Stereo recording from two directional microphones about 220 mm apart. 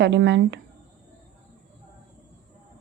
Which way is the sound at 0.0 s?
55° right (ahead or behind).